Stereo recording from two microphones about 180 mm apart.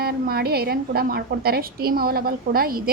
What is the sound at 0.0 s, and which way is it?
A woman's voice, 60° right (ahead or behind).